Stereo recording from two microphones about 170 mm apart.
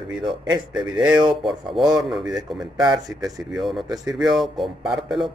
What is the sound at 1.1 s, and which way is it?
Speech, 30° right (ahead or behind).